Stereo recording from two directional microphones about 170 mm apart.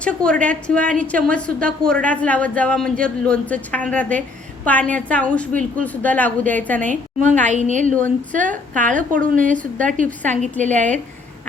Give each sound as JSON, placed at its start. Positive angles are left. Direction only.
{"t": 0.0, "sound": "a woman's voice", "side_deg": 5}
{"t": 6.9, "sound": "a woman's voice", "side_deg": -45}